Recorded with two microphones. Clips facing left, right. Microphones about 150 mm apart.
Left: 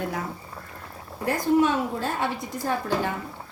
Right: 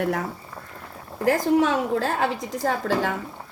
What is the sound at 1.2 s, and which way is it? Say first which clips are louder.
A woman's voice: right 2 dB; 90° right.